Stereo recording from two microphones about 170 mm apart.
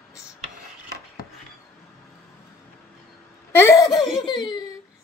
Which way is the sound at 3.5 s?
15° left (ahead or behind).